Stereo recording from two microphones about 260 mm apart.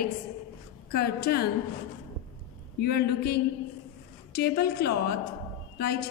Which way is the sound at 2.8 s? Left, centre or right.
Left.